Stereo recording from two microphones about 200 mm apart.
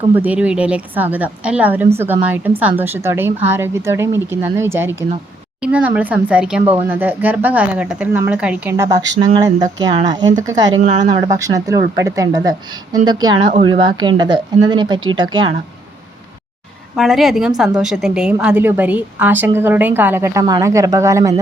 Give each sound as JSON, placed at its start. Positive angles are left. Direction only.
{"t": 0.1, "sound": "speech", "side_deg": -5}
{"t": 10.8, "sound": "speech", "side_deg": -35}
{"t": 11.2, "sound": "speech", "side_deg": -15}
{"t": 16.9, "sound": "a woman's voice", "side_deg": 0}